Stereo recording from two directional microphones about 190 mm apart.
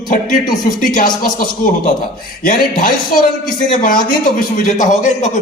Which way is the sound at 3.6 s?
45° left (ahead or behind).